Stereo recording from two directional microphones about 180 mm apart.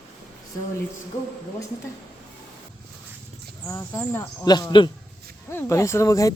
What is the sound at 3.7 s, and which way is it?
Speech, 15° left (ahead or behind).